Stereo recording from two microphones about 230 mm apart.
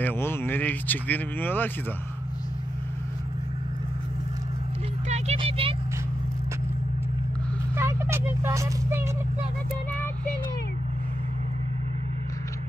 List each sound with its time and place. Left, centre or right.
0.0 s speech: centre
5.0 s vehicle: right
7.7 s a sound: centre